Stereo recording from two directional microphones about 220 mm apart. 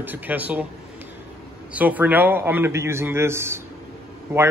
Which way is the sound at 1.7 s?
5° right (ahead or behind).